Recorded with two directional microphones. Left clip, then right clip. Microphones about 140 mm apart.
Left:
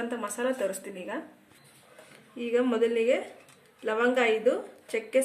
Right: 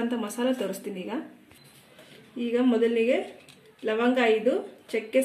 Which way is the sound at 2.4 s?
Centre (ahead or behind).